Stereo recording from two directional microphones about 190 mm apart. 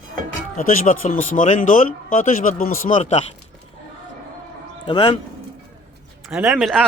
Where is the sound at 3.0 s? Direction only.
35° left (ahead or behind).